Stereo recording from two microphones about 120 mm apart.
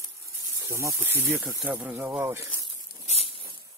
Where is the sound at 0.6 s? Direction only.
30° right (ahead or behind).